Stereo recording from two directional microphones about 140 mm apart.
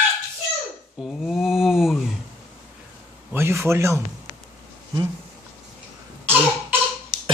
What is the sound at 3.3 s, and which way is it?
Speech, 20° right (ahead or behind).